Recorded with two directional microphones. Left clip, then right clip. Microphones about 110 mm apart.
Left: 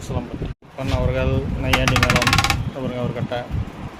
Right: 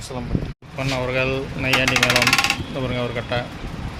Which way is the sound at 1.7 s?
10° right (ahead or behind).